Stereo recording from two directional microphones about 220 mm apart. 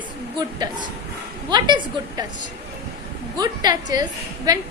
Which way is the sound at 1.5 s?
20° right (ahead or behind).